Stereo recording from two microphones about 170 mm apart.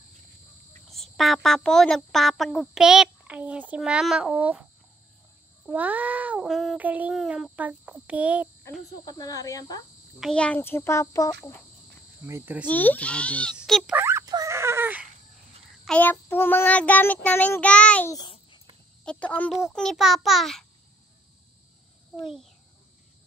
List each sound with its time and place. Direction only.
0.8 s speech: centre (ahead or behind)
5.7 s speech: 10° right (ahead or behind)
9.0 s speech: 20° left (ahead or behind)
10.2 s child singing: 5° left (ahead or behind)
12.3 s speech: 15° right (ahead or behind)
12.6 s child singing: 10° left (ahead or behind)
13.6 s a sound: centre (ahead or behind)
13.9 s a sound: 15° right (ahead or behind)
15.8 s child singing: 10° left (ahead or behind)
18.1 s babbling: 25° left (ahead or behind)
19.0 s child singing: 10° left (ahead or behind)
19.5 s speech: centre (ahead or behind)
22.2 s speech: centre (ahead or behind)